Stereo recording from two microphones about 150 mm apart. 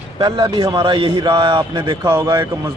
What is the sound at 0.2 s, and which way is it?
A man's voice, 30° right (ahead or behind).